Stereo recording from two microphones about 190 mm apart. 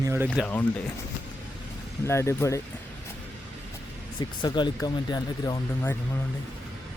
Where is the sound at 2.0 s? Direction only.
15° left (ahead or behind).